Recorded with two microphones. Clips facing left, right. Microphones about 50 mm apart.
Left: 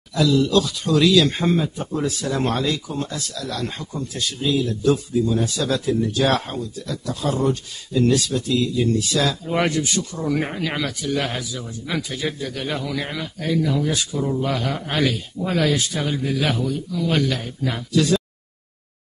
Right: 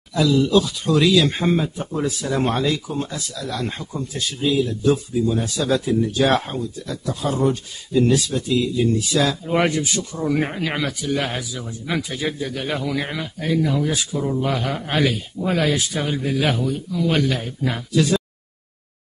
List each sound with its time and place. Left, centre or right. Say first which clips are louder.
0.1 s speech: right 1 dB; centre